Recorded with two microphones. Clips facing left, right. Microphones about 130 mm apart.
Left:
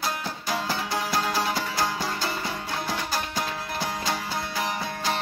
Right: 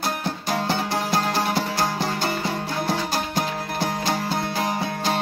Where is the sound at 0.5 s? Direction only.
25° right (ahead or behind).